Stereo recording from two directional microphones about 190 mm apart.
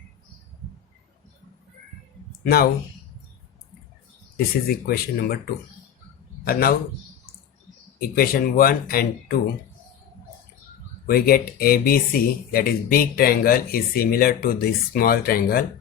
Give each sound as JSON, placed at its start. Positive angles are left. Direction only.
{"t": 2.4, "sound": "speech", "side_deg": 55}
{"t": 4.4, "sound": "speech", "side_deg": 50}
{"t": 6.4, "sound": "a man's voice", "side_deg": 50}
{"t": 7.9, "sound": "speech", "side_deg": 50}
{"t": 11.0, "sound": "speech", "side_deg": 50}